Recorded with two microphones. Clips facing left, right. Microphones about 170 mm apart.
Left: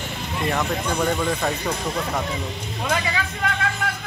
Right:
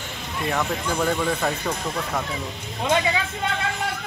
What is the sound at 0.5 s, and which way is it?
Speech, centre (ahead or behind).